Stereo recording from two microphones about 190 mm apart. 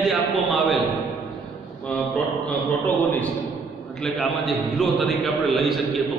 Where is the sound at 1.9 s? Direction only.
Centre (ahead or behind).